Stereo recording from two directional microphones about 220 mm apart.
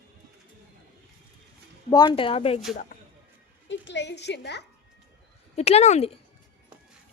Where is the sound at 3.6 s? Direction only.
55° left (ahead or behind).